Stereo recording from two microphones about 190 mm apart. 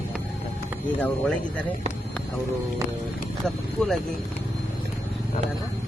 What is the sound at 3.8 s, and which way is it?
Speech, centre (ahead or behind).